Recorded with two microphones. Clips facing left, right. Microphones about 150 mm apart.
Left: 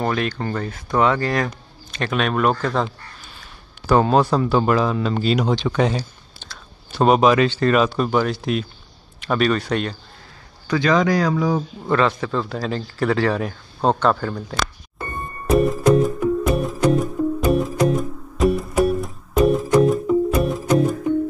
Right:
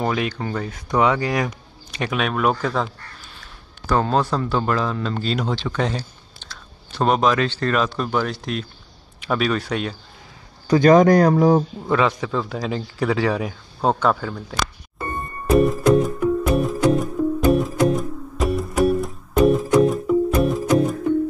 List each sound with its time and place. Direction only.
0.0 s speech: 10° right (ahead or behind)
3.8 s speech: 10° left (ahead or behind); by 9.9 s 5° right (ahead or behind)
10.7 s speech: 50° right (ahead or behind)
12.2 s speech: 10° right (ahead or behind)
15.1 s music: centre (ahead or behind)